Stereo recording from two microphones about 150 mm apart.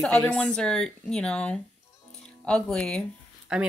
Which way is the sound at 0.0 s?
5° left (ahead or behind).